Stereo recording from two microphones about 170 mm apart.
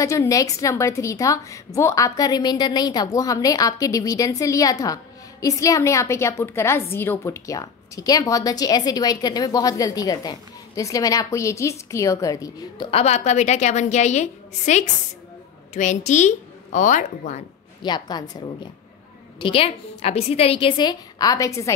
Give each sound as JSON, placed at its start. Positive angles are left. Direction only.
{"t": 0.0, "sound": "a woman's voice", "side_deg": 20}
{"t": 12.9, "sound": "a woman's voice", "side_deg": 40}
{"t": 17.8, "sound": "a woman's voice", "side_deg": 25}